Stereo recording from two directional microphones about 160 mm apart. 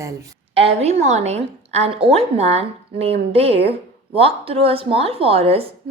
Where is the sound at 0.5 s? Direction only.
40° right (ahead or behind).